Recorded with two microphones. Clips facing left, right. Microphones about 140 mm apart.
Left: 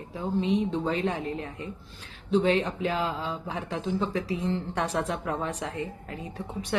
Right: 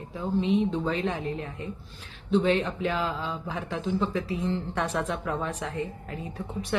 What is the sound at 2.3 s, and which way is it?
Speech, 35° left (ahead or behind).